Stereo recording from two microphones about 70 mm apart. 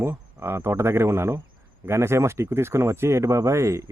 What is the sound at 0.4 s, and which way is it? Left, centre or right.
A man's voice, right.